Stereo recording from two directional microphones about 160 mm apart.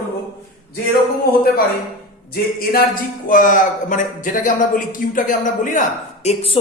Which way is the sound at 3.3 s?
55° left (ahead or behind).